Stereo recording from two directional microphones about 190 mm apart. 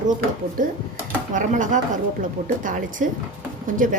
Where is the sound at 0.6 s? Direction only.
45° right (ahead or behind).